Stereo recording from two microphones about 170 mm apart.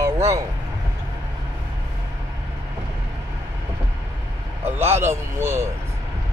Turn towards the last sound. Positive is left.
turn(degrees=-15)  # may be behind; listen again after turning